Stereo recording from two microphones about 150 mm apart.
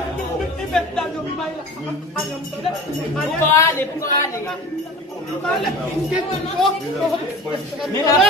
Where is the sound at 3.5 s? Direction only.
20° left (ahead or behind).